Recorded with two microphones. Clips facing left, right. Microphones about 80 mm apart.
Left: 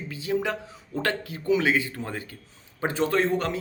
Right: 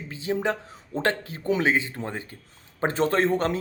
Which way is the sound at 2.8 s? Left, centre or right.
Right.